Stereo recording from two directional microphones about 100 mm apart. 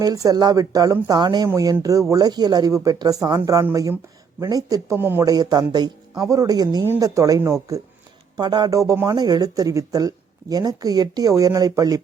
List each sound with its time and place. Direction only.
0.0 s speech: 35° right (ahead or behind)
1.5 s speech: 30° right (ahead or behind)
4.9 s speech: 20° right (ahead or behind)
5.2 s speech: 40° right (ahead or behind)
8.4 s speech: 45° right (ahead or behind)